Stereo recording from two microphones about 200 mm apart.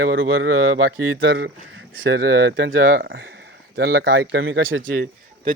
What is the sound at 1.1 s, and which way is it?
Speech, 60° right (ahead or behind).